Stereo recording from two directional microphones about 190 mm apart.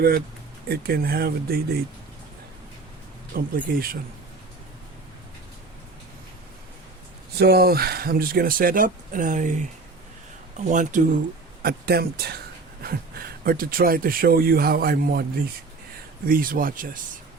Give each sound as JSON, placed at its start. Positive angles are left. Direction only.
{"t": 0.7, "sound": "speech", "side_deg": -55}
{"t": 3.3, "sound": "speech", "side_deg": -50}
{"t": 7.3, "sound": "speech", "side_deg": -55}
{"t": 10.6, "sound": "speech", "side_deg": -40}
{"t": 11.6, "sound": "speech", "side_deg": -55}